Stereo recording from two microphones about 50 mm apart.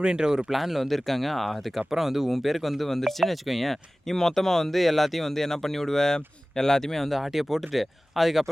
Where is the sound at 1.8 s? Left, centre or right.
Centre.